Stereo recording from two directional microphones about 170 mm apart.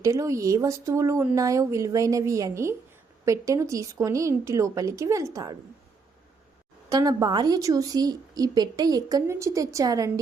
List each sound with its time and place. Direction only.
0.0 s a woman's voice: 20° right (ahead or behind)
6.9 s a woman's voice: 20° right (ahead or behind)